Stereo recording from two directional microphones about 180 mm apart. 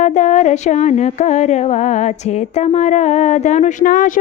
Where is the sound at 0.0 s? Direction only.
40° left (ahead or behind).